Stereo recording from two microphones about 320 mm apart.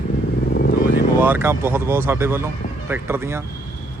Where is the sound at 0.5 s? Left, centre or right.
Left.